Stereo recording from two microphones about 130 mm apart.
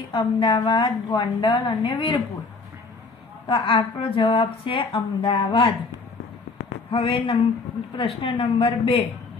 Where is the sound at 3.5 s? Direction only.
45° left (ahead or behind).